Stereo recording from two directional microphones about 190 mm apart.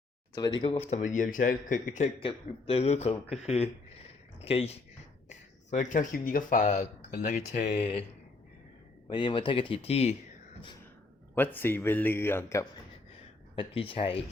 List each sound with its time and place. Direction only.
0.6 s speech: 35° left (ahead or behind)
2.2 s speech: 30° left (ahead or behind)
9.0 s speech: 25° left (ahead or behind)
11.3 s speech: 10° left (ahead or behind)
13.6 s speech: 30° left (ahead or behind)